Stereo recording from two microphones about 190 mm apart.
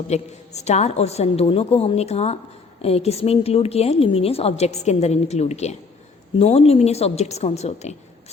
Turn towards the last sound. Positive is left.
turn(degrees=35)  # may be behind; listen again after turning